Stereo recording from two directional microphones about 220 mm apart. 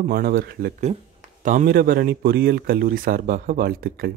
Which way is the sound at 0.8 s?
35° right (ahead or behind).